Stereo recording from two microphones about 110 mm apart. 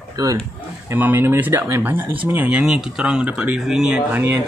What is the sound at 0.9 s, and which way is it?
Speech, 20° right (ahead or behind).